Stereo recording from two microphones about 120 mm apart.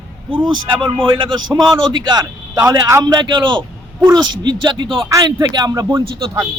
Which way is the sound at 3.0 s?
35° right (ahead or behind).